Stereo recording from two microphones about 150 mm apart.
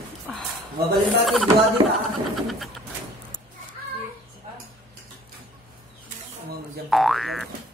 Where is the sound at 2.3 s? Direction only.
Centre (ahead or behind).